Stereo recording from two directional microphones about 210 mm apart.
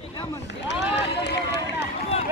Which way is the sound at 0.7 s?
55° left (ahead or behind).